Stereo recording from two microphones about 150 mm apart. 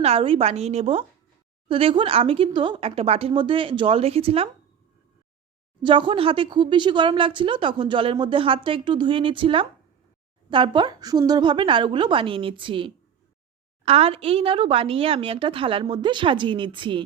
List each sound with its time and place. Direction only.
0.0 s a woman's voice: 40° right (ahead or behind)
5.8 s speech: 35° right (ahead or behind)